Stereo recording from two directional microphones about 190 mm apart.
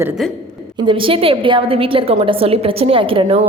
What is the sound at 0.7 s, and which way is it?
A woman's voice, 25° right (ahead or behind).